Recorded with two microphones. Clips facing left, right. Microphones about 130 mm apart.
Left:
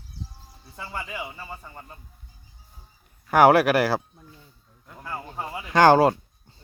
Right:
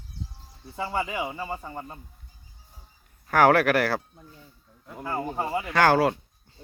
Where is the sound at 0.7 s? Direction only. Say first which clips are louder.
Right 6 dB; 65° right (ahead or behind).